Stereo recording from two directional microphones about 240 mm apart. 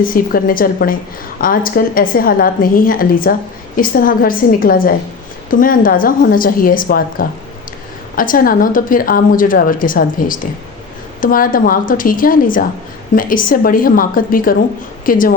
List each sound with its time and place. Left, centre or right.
0.0 s a woman's voice: left